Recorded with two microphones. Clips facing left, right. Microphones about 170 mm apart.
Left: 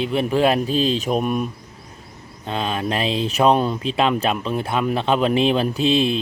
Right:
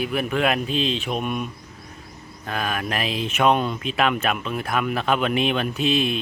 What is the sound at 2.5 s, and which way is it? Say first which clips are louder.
Speech: left 3 dB; 25° left (ahead or behind).